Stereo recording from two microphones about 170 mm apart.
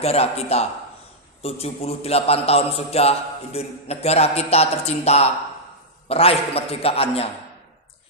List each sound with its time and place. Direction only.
0.0 s a man's voice: 35° left (ahead or behind)